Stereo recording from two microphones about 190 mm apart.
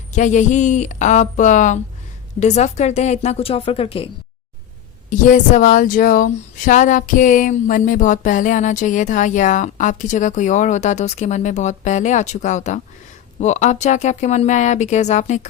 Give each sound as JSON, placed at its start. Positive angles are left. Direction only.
{"t": 0.1, "sound": "speech", "side_deg": 40}
{"t": 5.0, "sound": "speech", "side_deg": 40}